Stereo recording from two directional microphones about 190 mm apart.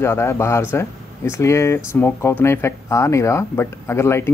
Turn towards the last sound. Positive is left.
turn(degrees=15)  # may be behind; listen again after turning